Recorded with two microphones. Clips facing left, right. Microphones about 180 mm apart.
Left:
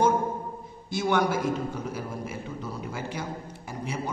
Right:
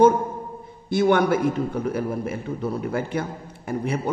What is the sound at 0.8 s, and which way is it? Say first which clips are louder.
A man's voice: right 6 dB; 55° right (ahead or behind).